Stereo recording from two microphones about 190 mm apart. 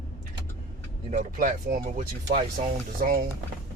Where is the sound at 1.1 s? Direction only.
40° right (ahead or behind).